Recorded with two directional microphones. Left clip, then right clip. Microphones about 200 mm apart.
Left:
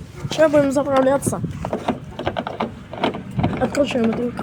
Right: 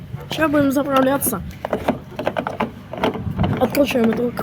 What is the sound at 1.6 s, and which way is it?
Sewing machine, 40° right (ahead or behind).